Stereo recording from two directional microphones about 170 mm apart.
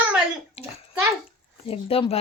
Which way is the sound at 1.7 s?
35° left (ahead or behind).